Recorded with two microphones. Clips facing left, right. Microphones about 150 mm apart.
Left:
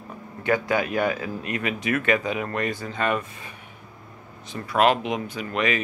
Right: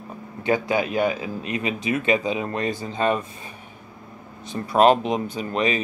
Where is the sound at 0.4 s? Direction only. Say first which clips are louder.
Right 1 dB; 25° right (ahead or behind).